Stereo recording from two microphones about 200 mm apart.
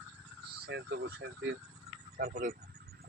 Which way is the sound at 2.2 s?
45° right (ahead or behind).